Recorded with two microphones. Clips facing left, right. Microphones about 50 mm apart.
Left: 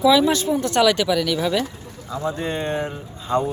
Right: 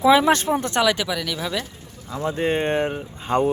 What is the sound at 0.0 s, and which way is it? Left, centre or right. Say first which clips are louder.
Speech: even; right.